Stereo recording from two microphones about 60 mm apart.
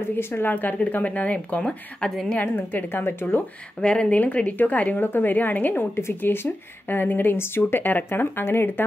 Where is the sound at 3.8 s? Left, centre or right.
Centre.